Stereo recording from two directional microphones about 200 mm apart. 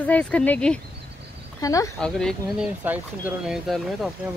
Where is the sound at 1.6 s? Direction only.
15° left (ahead or behind).